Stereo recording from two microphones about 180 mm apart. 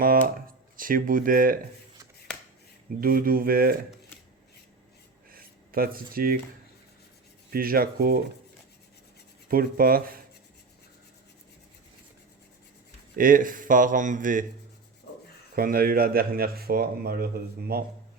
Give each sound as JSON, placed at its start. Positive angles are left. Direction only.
{"t": 0.8, "sound": "speech", "side_deg": -50}
{"t": 2.3, "sound": "a sound", "side_deg": 5}
{"t": 3.0, "sound": "speech", "side_deg": -55}
{"t": 5.3, "sound": "a sound", "side_deg": -55}
{"t": 7.5, "sound": "speech", "side_deg": -55}
{"t": 9.5, "sound": "speech", "side_deg": -55}
{"t": 13.1, "sound": "speech", "side_deg": -50}
{"t": 15.5, "sound": "speech", "side_deg": -55}